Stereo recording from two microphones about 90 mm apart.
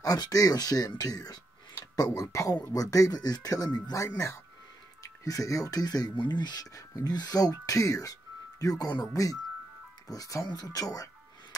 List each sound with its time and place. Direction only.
0.0 s speech: 45° left (ahead or behind)
5.0 s speech: 40° left (ahead or behind)